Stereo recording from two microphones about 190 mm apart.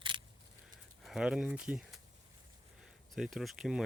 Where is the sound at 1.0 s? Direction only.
5° right (ahead or behind).